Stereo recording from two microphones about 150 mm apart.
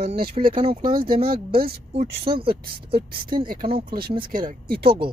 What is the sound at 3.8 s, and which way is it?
Speech, 85° right.